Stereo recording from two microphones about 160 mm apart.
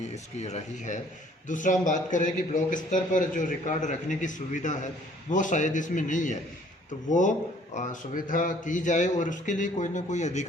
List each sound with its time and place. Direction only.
0.1 s a man's voice: 45° left (ahead or behind)